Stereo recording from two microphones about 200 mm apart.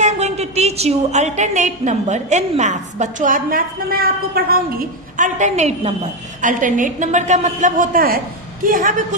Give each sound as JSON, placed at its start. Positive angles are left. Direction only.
{"t": 0.0, "sound": "a woman's voice", "side_deg": -35}